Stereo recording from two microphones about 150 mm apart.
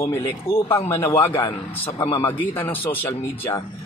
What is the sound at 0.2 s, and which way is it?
Speech, 40° left (ahead or behind).